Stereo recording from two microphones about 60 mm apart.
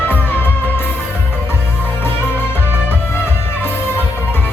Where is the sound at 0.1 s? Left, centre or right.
Left.